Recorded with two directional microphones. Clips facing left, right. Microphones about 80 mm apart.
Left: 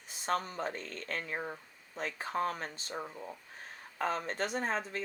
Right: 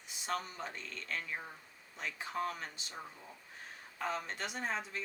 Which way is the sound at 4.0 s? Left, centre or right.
Left.